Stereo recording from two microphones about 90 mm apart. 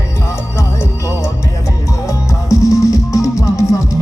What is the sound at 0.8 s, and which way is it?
Music, 35° left (ahead or behind).